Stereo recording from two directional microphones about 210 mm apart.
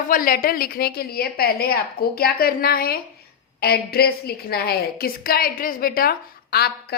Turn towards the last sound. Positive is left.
turn(degrees=45)  # may be behind; listen again after turning